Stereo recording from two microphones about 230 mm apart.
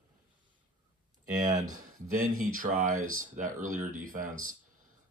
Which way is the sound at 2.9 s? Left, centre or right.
Right.